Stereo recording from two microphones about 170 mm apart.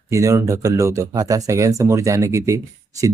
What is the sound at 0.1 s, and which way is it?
Speech, 20° right (ahead or behind).